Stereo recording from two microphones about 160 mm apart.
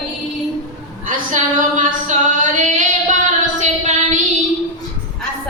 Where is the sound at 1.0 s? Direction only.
55° right (ahead or behind).